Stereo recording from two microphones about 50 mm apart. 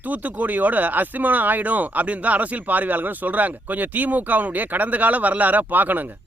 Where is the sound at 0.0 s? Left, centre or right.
Right.